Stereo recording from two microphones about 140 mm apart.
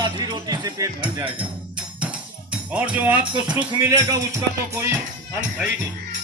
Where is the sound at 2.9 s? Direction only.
10° right (ahead or behind).